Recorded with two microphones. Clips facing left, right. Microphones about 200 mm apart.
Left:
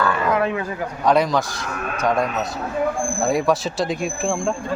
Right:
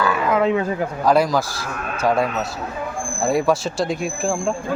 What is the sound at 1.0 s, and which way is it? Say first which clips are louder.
Speech: right 1 dB; 5° right (ahead or behind).